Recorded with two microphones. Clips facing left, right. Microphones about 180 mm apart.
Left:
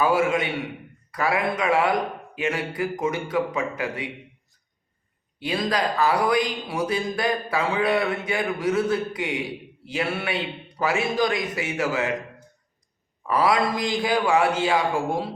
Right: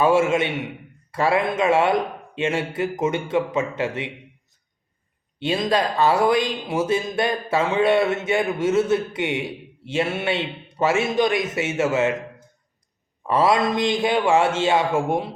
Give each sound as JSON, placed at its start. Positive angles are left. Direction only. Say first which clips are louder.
{"t": 0.0, "sound": "a man's voice", "louder": "right 3 dB", "side_deg": -25}
{"t": 5.4, "sound": "a man's voice", "louder": "right 3 dB", "side_deg": -25}
{"t": 13.2, "sound": "a man's voice", "louder": "right 2 dB", "side_deg": -25}